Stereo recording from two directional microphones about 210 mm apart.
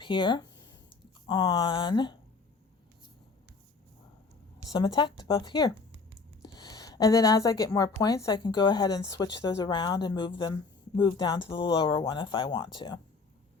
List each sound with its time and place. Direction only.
0.0 s a woman's voice: 20° left (ahead or behind)
4.7 s a woman's voice: 20° left (ahead or behind)